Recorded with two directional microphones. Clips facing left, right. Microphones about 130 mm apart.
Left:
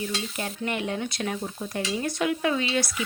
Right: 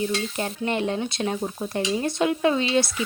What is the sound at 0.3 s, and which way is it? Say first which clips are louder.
Stir: right 4 dB; 30° right (ahead or behind).